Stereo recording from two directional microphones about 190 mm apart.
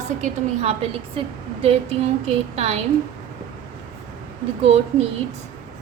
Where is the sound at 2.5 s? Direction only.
35° right (ahead or behind).